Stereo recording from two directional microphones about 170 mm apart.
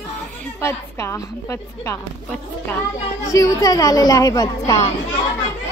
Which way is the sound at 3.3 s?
20° left (ahead or behind).